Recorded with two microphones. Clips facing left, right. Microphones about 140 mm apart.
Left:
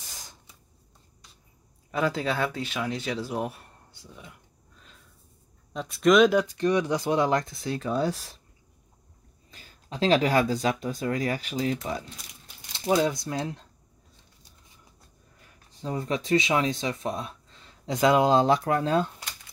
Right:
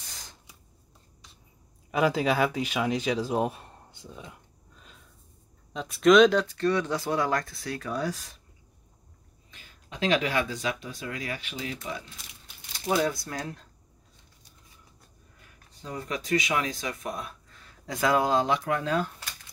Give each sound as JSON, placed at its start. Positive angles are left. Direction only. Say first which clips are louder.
{"t": 1.9, "sound": "speech", "louder": "right 2 dB", "side_deg": -15}
{"t": 5.7, "sound": "speech", "louder": "right 1 dB", "side_deg": 0}
{"t": 9.5, "sound": "speech", "louder": "left 5 dB", "side_deg": 35}
{"t": 12.8, "sound": "speech", "louder": "left 3 dB", "side_deg": 20}
{"t": 15.8, "sound": "speech", "louder": "left 5 dB", "side_deg": 30}